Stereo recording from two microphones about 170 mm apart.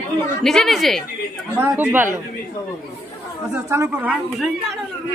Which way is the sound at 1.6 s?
10° right (ahead or behind).